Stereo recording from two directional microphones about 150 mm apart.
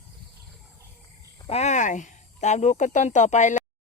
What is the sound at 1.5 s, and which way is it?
Speech, 50° left (ahead or behind).